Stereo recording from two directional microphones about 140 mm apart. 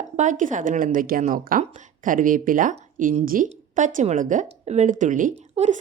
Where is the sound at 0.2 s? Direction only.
65° right (ahead or behind).